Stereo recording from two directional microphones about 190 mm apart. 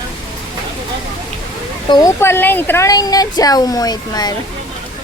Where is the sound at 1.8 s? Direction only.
20° left (ahead or behind).